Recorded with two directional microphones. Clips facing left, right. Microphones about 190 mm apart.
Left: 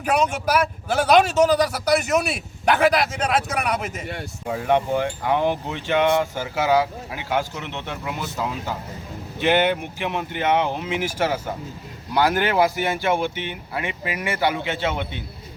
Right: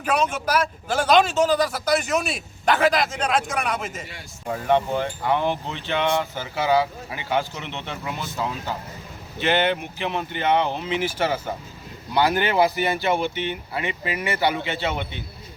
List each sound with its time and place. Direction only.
0.0 s a man's voice: 10° left (ahead or behind)
4.0 s speech: 55° left (ahead or behind)
4.4 s a man's voice: 5° left (ahead or behind)